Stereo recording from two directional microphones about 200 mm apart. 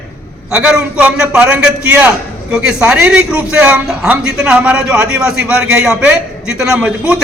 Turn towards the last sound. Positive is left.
turn(degrees=-5)  # may be behind; listen again after turning